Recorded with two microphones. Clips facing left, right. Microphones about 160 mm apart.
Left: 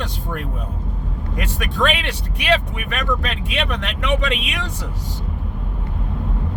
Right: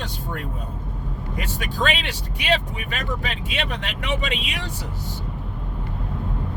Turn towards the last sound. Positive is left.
turn(degrees=70)  # may be behind; listen again after turning